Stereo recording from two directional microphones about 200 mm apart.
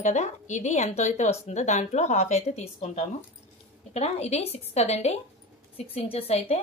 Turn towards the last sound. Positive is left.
turn(degrees=30)  # may be behind; listen again after turning